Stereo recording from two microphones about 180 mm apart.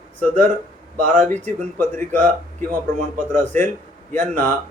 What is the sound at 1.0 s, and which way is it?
Speech, 45° right (ahead or behind).